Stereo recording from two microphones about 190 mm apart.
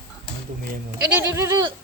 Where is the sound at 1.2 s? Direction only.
15° right (ahead or behind).